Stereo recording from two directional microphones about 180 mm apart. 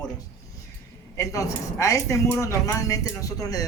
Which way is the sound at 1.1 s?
15° left (ahead or behind).